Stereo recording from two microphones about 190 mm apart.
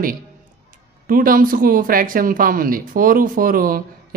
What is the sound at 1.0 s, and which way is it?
Speech, 45° right (ahead or behind).